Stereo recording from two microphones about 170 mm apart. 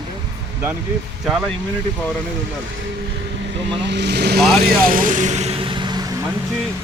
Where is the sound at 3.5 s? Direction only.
90° right; by 4.4 s 75° right (ahead or behind).